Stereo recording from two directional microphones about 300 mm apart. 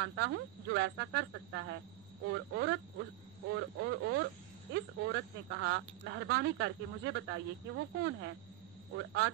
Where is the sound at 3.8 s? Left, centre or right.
Right.